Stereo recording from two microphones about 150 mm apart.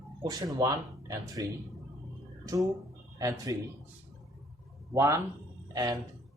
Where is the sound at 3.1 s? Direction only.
25° right (ahead or behind).